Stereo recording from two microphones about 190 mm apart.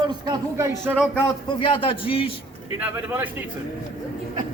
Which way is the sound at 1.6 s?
25° left (ahead or behind).